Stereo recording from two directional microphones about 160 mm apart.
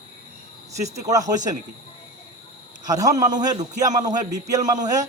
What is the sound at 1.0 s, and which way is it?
Speech, 25° right (ahead or behind).